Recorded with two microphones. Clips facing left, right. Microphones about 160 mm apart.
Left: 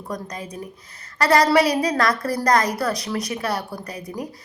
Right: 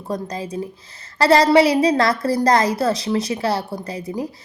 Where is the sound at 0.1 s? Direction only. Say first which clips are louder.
Right 6 dB; 30° right (ahead or behind).